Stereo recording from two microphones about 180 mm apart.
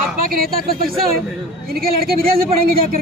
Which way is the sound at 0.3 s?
55° right (ahead or behind).